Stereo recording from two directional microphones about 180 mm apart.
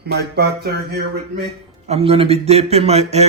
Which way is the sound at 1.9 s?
35° right (ahead or behind).